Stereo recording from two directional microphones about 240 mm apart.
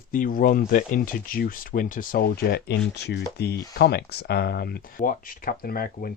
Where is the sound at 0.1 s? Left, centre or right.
Left.